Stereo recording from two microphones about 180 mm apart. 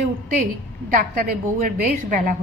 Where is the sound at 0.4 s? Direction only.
50° right (ahead or behind).